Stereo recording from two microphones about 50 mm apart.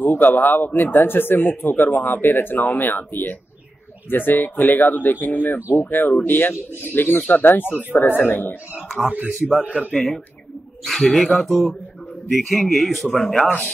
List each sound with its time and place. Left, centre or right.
0.0 s speech: left
0.7 s speech: left
0.9 s speech: left
9.0 s speech: right
10.9 s a man's voice: centre